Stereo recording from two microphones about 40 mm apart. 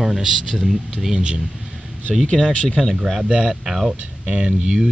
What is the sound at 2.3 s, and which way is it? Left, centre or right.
Speech, centre.